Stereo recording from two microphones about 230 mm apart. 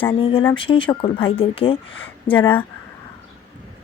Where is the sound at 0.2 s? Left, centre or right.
Left.